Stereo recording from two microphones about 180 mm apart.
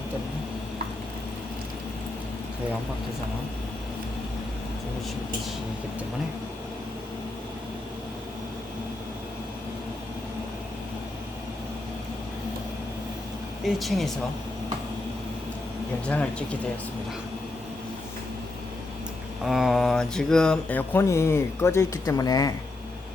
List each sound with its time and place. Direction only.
13.7 s speech: centre (ahead or behind)
16.0 s speech: 5° left (ahead or behind)
19.5 s speech: centre (ahead or behind); by 22.5 s 20° left (ahead or behind)